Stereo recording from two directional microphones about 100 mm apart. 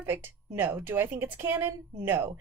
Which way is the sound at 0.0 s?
20° right (ahead or behind).